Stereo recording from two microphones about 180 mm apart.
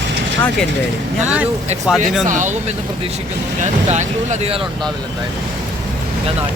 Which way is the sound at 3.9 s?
35° right (ahead or behind).